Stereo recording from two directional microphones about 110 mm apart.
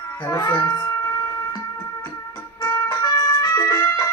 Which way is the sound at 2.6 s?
30° left (ahead or behind).